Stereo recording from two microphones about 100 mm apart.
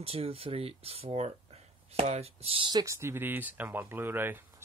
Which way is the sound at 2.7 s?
40° right (ahead or behind).